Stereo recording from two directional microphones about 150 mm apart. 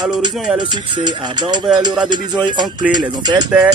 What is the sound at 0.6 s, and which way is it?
Speech, 30° right (ahead or behind).